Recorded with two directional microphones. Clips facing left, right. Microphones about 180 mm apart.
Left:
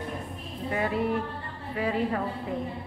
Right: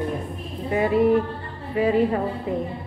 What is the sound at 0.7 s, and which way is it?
A woman's voice, 15° right (ahead or behind).